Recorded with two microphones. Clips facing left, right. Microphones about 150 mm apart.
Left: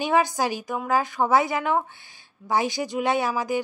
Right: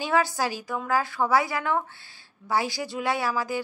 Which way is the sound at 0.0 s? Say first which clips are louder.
Left 3 dB; 20° left (ahead or behind).